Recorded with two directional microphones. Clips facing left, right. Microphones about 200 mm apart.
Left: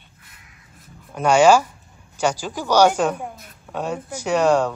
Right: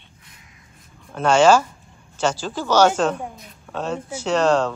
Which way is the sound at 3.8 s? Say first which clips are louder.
Even; 15° left (ahead or behind).